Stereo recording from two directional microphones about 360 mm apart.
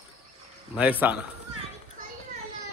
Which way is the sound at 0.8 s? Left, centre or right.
Centre.